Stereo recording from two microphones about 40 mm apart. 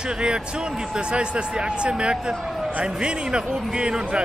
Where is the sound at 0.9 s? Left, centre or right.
Right.